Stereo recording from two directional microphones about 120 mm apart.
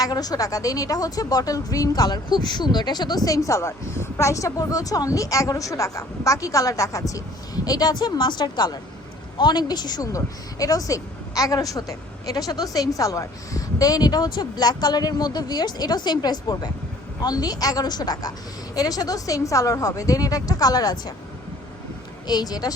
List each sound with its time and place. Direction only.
0.0 s speech: 30° left (ahead or behind)
22.3 s speech: 35° left (ahead or behind)